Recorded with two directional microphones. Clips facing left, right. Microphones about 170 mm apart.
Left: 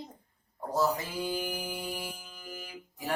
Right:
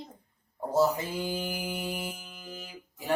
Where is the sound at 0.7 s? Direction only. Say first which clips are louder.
Right 4 dB; 25° right (ahead or behind).